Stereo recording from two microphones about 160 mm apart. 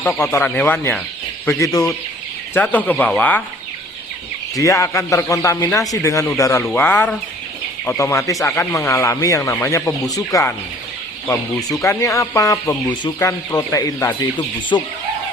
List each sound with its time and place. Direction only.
0.0 s speech: 15° left (ahead or behind)
4.5 s speech: 20° left (ahead or behind)
11.8 s speech: 20° left (ahead or behind)